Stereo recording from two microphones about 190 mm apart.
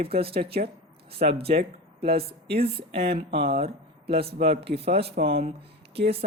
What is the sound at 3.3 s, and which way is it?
Speech, 30° right (ahead or behind).